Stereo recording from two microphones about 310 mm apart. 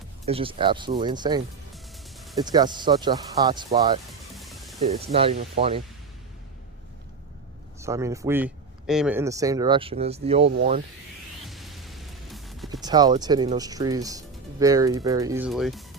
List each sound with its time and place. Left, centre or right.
0.3 s speech: centre
1.7 s music: centre
2.4 s speech: centre
4.4 s music: centre
4.8 s speech: centre
7.8 s speech: centre
11.4 s music: centre
12.8 s speech: centre